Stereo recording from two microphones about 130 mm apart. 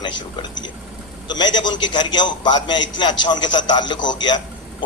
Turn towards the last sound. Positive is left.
turn(degrees=35)  # may be behind; listen again after turning